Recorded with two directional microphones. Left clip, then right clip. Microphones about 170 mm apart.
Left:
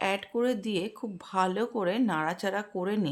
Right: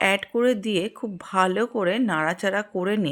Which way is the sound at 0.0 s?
20° right (ahead or behind).